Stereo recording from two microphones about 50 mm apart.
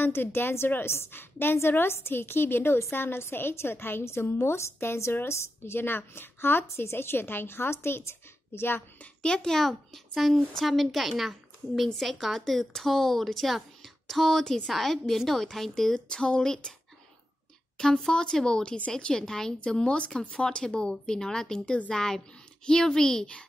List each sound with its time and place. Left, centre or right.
0.0 s a woman's voice: left
9.2 s a woman's voice: centre
9.6 s a woman's voice: centre
17.7 s a woman's voice: centre